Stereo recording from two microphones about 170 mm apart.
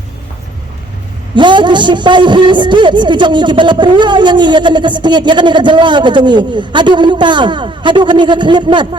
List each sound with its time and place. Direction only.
1.4 s a man's voice: 25° right (ahead or behind)